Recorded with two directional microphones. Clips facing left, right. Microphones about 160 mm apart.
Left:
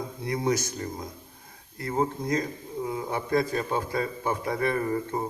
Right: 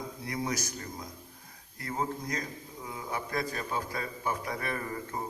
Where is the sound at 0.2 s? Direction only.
25° left (ahead or behind).